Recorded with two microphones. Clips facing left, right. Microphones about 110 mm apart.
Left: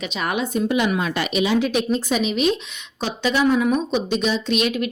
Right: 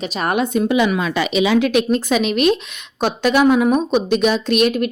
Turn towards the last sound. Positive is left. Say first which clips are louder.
# right 5 dB
turn(degrees=-50)  # may be behind; listen again after turning